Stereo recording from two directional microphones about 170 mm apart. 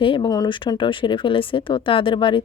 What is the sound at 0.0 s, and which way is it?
Speech, 30° left (ahead or behind).